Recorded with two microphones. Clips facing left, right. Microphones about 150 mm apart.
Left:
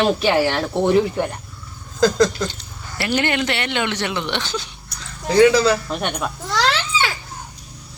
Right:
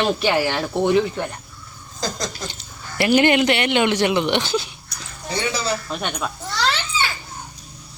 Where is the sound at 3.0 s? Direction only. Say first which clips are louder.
Right 5 dB; 15° right (ahead or behind).